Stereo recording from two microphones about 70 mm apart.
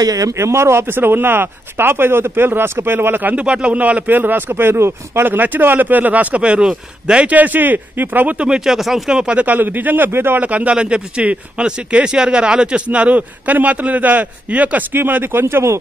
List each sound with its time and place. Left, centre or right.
0.0 s speech: right
0.4 s speech: right
3.3 s speech: centre
8.5 s speech: centre; by 10.4 s right
10.4 s speech: centre; by 15.8 s right